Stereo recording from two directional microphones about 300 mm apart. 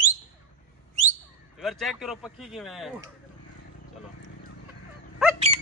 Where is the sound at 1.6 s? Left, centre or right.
Centre.